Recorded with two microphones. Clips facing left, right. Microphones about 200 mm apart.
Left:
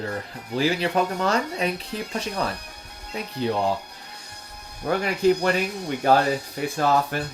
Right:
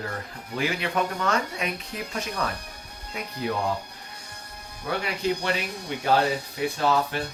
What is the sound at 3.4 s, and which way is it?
Speech, 30° left (ahead or behind).